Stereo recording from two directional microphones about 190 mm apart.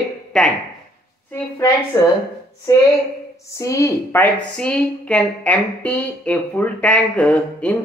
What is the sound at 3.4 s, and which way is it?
A woman's voice, 15° left (ahead or behind).